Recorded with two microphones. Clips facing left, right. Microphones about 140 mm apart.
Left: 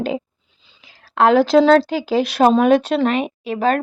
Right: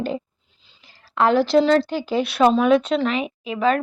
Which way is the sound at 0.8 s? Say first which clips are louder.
Left 4 dB; 80° left.